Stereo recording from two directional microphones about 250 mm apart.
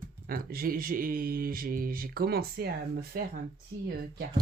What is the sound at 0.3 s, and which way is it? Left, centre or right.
Speech, right.